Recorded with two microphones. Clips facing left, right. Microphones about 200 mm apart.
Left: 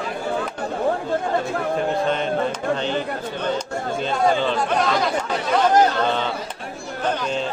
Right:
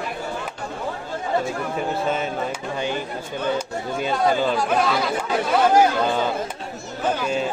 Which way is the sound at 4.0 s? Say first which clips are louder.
Even; 10° right (ahead or behind).